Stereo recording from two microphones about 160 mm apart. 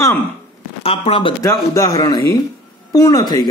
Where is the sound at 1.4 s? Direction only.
20° left (ahead or behind).